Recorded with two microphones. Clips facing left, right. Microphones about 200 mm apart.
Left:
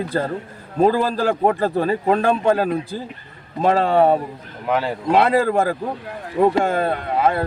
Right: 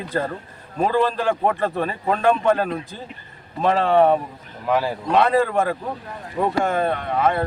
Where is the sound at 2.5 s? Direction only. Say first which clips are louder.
Left 4 dB; 5° left (ahead or behind).